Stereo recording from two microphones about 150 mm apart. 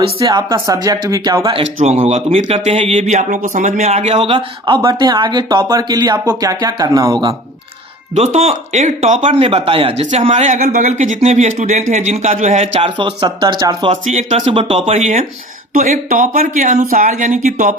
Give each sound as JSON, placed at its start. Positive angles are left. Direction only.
{"t": 0.2, "sound": "speech", "side_deg": -30}
{"t": 1.8, "sound": "speech", "side_deg": -45}
{"t": 8.1, "sound": "speech", "side_deg": -45}
{"t": 13.9, "sound": "speech", "side_deg": -50}